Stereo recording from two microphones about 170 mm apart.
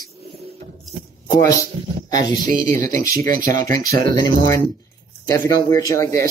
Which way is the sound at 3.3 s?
55° right (ahead or behind).